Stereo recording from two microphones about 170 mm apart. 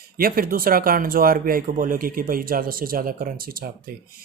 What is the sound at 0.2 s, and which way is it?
Speech, 60° right (ahead or behind).